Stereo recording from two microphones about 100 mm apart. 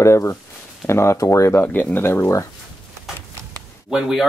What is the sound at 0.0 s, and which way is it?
Speech, 30° left (ahead or behind).